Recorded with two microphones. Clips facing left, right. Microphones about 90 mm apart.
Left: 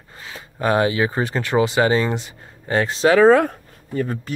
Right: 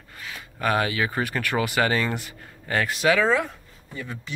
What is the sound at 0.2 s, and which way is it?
Speech, 25° left (ahead or behind).